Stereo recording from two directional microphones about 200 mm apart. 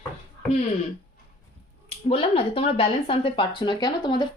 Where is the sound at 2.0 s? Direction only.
30° left (ahead or behind).